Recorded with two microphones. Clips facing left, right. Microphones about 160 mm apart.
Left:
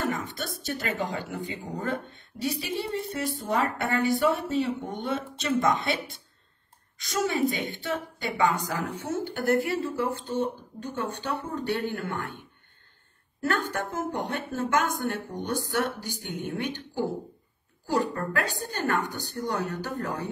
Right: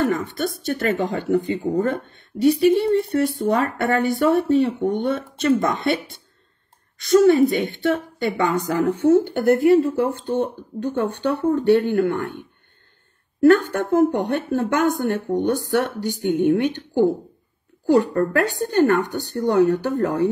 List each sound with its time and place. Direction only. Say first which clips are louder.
0.3 s speech: right 9 dB; 60° right (ahead or behind)
7.0 s speech: right 13 dB; 65° right (ahead or behind)
13.5 s speech: right 13 dB; 60° right (ahead or behind)